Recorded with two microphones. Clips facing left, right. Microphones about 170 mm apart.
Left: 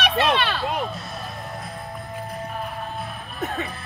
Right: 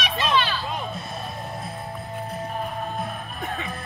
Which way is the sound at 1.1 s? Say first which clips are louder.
Right 1 dB; 25° right (ahead or behind).